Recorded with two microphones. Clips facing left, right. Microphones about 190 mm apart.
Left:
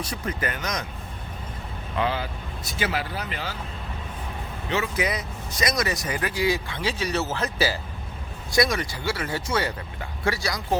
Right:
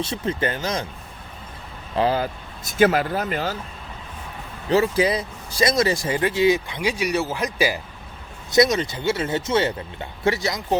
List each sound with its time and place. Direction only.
0.0 s speech: 25° right (ahead or behind)
2.0 s speech: 40° right (ahead or behind)
4.7 s speech: 35° right (ahead or behind)